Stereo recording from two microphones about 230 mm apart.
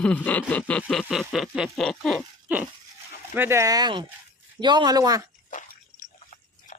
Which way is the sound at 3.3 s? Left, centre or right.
Centre.